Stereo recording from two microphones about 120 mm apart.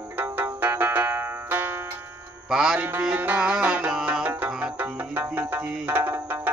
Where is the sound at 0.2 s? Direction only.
15° right (ahead or behind).